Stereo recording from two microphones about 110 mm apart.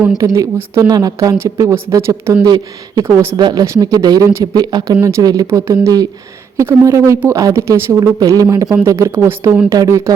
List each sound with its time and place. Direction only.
0.3 s speech: 30° right (ahead or behind)
2.4 s a woman's voice: 35° right (ahead or behind)
9.6 s speech: 35° right (ahead or behind)